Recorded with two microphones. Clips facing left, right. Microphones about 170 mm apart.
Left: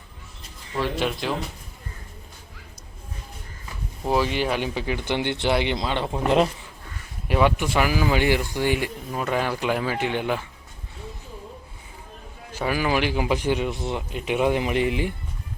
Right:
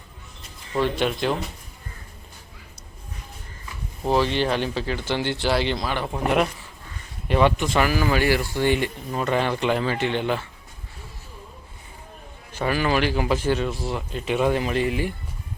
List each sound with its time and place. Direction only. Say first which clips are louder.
0.8 s speech: right 3 dB; centre (ahead or behind)
4.1 s speech: right 1 dB; 10° left (ahead or behind); by 6.5 s 25° left (ahead or behind)
7.3 s speech: right 1 dB; 5° left (ahead or behind)
12.5 s speech: right 1 dB; 10° left (ahead or behind)